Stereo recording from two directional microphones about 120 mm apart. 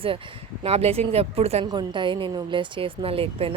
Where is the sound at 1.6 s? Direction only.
35° right (ahead or behind).